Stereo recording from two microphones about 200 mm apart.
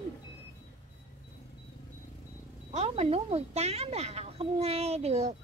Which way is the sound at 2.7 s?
30° right (ahead or behind).